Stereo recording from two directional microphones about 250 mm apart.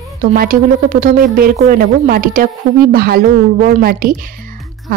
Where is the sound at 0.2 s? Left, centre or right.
Right.